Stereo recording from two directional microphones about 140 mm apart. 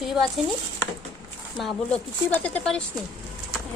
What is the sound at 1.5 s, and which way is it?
Speech, centre (ahead or behind).